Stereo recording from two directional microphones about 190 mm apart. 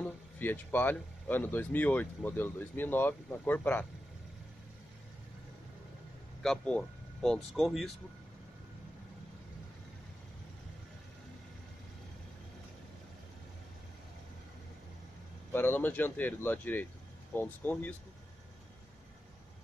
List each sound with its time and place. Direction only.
0.0 s speech: 10° left (ahead or behind)
6.4 s speech: 5° left (ahead or behind)
15.5 s speech: 10° left (ahead or behind)